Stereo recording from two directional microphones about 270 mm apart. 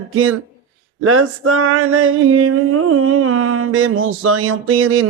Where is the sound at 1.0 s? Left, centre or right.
Right.